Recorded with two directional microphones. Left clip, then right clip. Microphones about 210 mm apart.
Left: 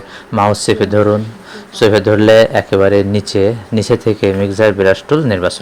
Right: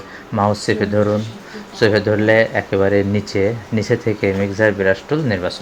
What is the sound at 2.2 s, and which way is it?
Speech, 30° left (ahead or behind).